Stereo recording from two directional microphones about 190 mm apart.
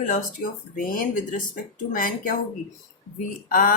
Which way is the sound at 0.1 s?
45° left (ahead or behind).